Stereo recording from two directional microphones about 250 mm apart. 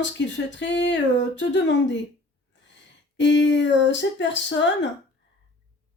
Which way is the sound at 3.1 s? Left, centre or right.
Left.